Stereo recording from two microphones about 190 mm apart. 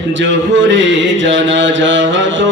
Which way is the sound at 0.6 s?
80° right.